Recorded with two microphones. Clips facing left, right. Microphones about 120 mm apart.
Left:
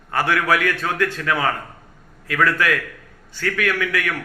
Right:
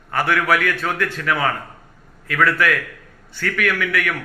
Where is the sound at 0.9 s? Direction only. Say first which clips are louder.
Left 1 dB; 20° left (ahead or behind).